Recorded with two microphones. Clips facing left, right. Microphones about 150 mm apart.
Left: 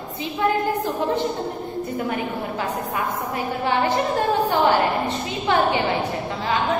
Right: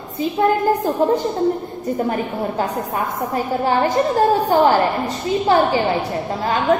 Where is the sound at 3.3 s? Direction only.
40° right (ahead or behind).